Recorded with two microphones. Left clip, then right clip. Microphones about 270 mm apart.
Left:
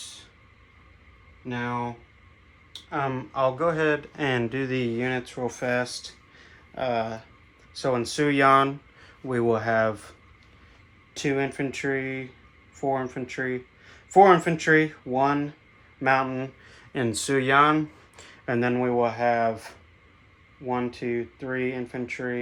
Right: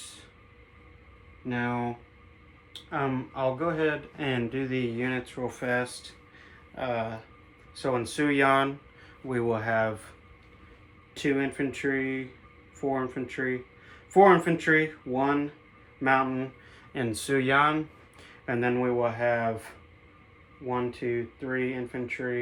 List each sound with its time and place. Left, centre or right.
1.5 s speech: centre
3.3 s speech: left
11.1 s speech: left
18.2 s speech: left